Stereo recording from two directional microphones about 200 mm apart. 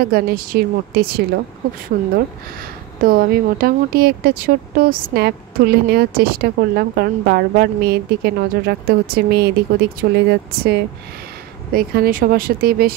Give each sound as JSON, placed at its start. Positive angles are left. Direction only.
{"t": 0.0, "sound": "speech", "side_deg": -50}
{"t": 3.0, "sound": "speech", "side_deg": -45}